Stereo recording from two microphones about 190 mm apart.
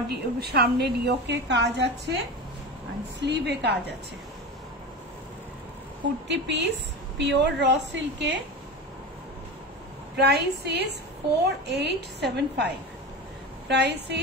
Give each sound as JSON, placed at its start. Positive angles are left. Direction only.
{"t": 0.1, "sound": "a woman's voice", "side_deg": -55}
{"t": 3.2, "sound": "a woman's voice", "side_deg": -65}
{"t": 6.2, "sound": "a woman's voice", "side_deg": -65}
{"t": 10.1, "sound": "a woman's voice", "side_deg": -60}